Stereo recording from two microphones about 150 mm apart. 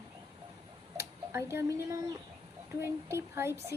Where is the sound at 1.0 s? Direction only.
20° right (ahead or behind).